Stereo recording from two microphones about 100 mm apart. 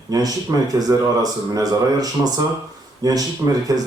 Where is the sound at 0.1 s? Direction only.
40° right (ahead or behind).